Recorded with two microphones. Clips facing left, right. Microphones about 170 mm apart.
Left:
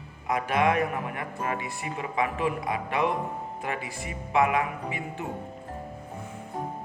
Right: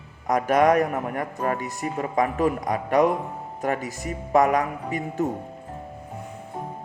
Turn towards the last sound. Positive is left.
turn(degrees=-40)  # may be behind; listen again after turning